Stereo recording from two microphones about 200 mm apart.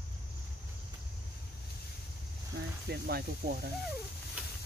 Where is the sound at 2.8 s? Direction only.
50° right (ahead or behind).